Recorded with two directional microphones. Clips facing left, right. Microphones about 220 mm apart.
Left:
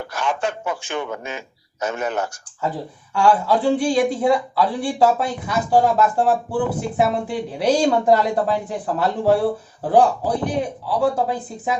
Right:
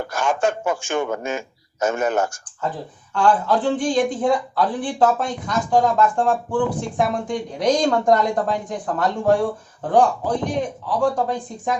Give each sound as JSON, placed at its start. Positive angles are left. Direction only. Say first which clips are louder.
{"t": 0.0, "sound": "speech", "louder": "right 3 dB", "side_deg": -45}
{"t": 3.2, "sound": "a man's voice", "louder": "left 1 dB", "side_deg": 10}